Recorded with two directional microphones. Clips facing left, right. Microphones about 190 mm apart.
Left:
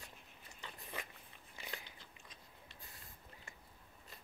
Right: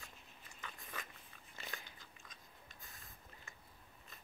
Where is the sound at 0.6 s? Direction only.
25° left (ahead or behind).